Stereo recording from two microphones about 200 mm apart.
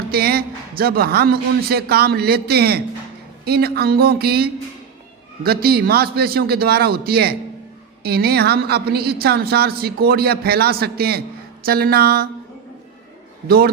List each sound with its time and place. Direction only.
0.1 s a man's voice: 50° right (ahead or behind)